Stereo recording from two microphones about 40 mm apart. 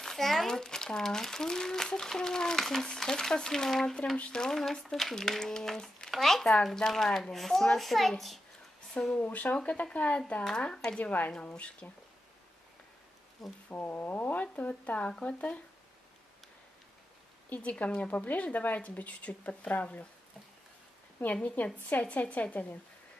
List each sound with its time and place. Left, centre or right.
0.0 s a sound: centre
0.5 s speech: centre
9.1 s speech: left
10.7 s speech: left
11.0 s speech: left
13.7 s speech: left
15.0 s speech: left
17.6 s speech: left
21.3 s speech: left